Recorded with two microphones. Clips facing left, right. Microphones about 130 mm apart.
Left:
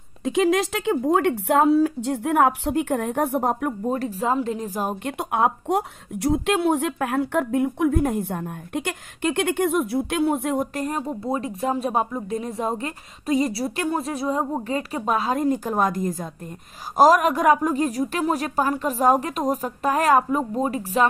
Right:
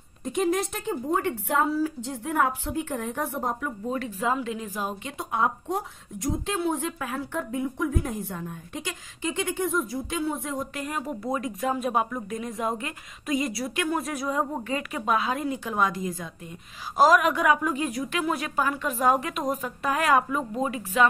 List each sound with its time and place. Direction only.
0.2 s speech: 90° left; by 3.9 s 60° left (ahead or behind)
3.9 s a woman's voice: 35° left (ahead or behind)
5.1 s speech: 65° left (ahead or behind)
10.7 s a woman's voice: 35° left (ahead or behind)